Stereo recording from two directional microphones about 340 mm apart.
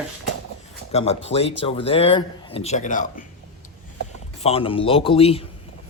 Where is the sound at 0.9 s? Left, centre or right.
Centre.